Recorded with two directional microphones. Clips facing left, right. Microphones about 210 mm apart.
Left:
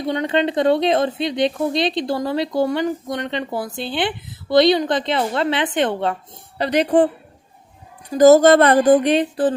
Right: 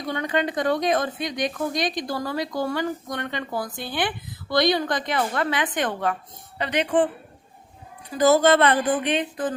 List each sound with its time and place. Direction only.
0.0 s a woman's voice: 25° left (ahead or behind)
8.1 s speech: 40° left (ahead or behind)